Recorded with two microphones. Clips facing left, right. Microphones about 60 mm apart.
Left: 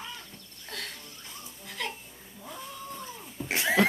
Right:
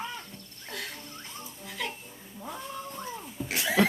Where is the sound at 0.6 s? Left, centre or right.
Centre.